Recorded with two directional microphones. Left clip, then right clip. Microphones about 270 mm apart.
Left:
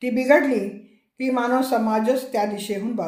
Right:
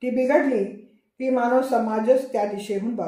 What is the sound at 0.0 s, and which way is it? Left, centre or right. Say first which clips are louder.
Speech: left 2 dB; left.